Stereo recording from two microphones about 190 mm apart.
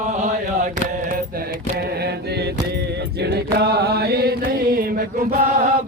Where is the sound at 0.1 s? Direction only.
40° right (ahead or behind).